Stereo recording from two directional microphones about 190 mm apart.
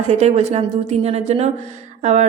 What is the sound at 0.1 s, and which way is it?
A woman's voice, 35° right (ahead or behind).